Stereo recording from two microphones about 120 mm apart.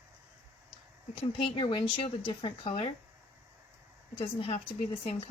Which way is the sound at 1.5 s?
50° left (ahead or behind).